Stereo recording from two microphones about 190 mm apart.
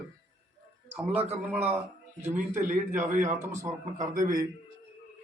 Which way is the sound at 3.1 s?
40° right (ahead or behind).